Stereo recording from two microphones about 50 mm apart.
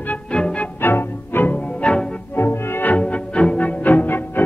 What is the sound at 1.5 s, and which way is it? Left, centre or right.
Music, left.